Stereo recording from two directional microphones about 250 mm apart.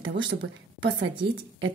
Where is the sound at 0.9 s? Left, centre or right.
Right.